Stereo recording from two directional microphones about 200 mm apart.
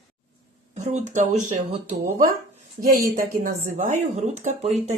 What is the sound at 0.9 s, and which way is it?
Speech, 35° right (ahead or behind).